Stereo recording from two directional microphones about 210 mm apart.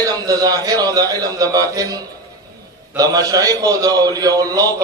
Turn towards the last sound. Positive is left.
turn(degrees=-15)  # may be behind; listen again after turning